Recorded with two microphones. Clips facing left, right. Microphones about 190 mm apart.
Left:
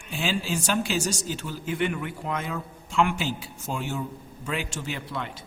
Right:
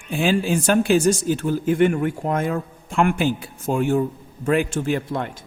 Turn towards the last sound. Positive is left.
turn(degrees=-50)  # may be behind; listen again after turning